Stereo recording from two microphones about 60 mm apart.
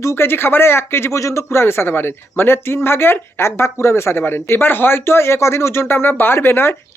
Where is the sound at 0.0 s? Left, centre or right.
Left.